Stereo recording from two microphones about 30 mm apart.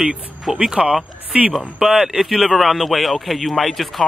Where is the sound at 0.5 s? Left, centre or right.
Centre.